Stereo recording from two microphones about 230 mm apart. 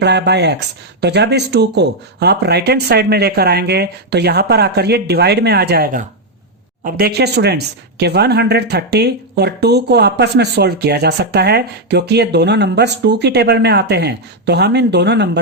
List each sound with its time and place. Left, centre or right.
0.0 s speech: right